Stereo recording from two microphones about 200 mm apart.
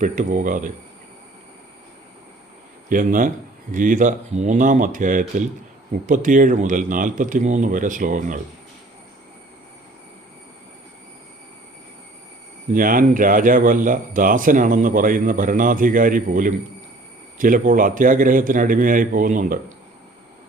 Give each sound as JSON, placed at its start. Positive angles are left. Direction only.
{"t": 0.0, "sound": "speech", "side_deg": -40}
{"t": 2.9, "sound": "speech", "side_deg": -45}
{"t": 12.7, "sound": "speech", "side_deg": -45}